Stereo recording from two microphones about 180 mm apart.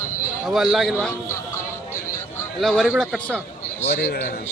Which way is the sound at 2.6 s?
Centre (ahead or behind).